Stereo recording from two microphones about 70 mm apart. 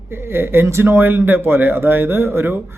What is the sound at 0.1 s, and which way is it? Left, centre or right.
Speech, right.